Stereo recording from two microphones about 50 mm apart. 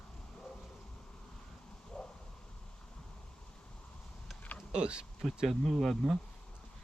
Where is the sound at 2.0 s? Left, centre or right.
Centre.